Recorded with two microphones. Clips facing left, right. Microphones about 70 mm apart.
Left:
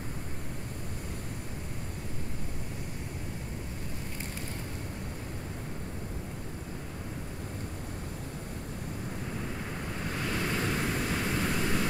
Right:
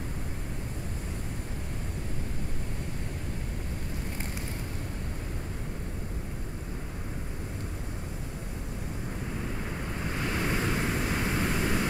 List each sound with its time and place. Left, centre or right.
10.0 s vehicle: centre